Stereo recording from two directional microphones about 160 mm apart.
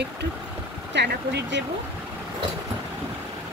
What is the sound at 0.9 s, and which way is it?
Speech, 90° right.